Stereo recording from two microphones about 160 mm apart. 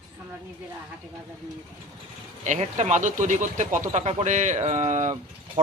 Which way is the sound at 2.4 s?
45° right (ahead or behind).